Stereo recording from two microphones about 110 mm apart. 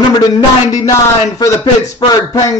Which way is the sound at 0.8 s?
30° left (ahead or behind).